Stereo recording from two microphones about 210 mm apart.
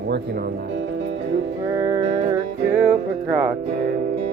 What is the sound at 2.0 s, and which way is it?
Music, 30° right (ahead or behind).